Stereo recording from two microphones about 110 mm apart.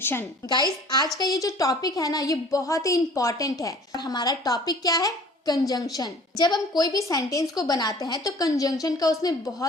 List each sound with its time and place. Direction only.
0.0 s a woman's voice: 20° left (ahead or behind)
0.4 s a woman's voice: 40° left (ahead or behind)